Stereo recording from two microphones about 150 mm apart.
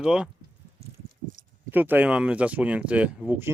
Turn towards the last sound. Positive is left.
turn(degrees=-15)  # may be behind; listen again after turning